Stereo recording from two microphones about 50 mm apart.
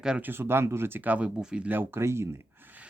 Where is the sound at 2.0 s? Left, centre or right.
Right.